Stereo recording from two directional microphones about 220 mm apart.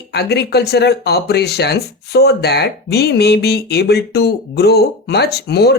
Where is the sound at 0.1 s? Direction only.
50° left (ahead or behind).